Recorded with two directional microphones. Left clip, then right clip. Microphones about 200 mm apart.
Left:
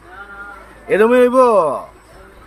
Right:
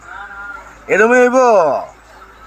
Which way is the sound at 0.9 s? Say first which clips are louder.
Right 1 dB; 20° left (ahead or behind).